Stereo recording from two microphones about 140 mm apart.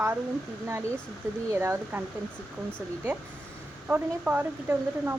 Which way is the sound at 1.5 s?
15° right (ahead or behind).